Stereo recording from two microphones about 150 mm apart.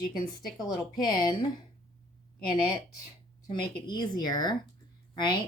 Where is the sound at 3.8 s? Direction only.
30° left (ahead or behind).